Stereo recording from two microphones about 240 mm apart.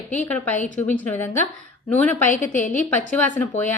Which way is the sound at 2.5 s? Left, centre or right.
Left.